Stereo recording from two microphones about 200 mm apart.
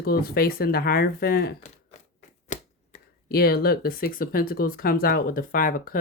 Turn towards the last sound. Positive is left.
turn(degrees=45)  # may be behind; listen again after turning